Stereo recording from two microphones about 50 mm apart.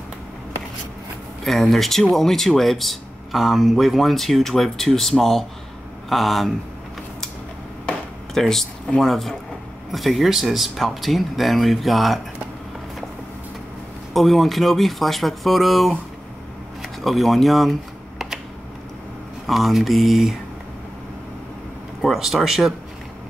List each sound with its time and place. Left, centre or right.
1.4 s speech: centre
8.4 s speech: centre
14.1 s speech: centre
19.4 s speech: centre
22.0 s speech: centre